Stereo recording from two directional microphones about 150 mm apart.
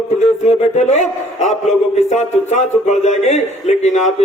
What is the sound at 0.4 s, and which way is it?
Speech, 50° left (ahead or behind).